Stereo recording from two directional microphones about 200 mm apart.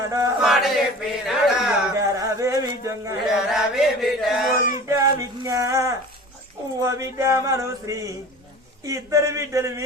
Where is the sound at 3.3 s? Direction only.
Centre (ahead or behind).